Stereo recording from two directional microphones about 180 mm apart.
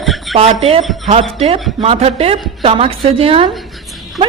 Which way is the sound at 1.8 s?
35° right (ahead or behind).